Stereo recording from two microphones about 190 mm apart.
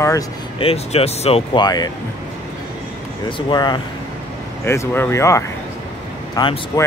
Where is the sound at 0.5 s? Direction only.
30° left (ahead or behind).